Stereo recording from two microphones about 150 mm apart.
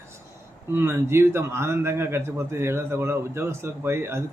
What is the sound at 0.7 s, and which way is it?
A man's voice, 15° right (ahead or behind).